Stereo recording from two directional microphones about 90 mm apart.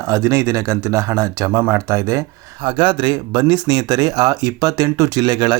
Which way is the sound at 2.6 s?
70° right (ahead or behind).